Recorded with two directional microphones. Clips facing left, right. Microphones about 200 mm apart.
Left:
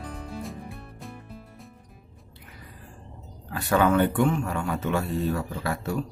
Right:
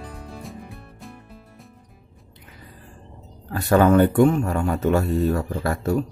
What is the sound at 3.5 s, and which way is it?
Speech, 40° right (ahead or behind).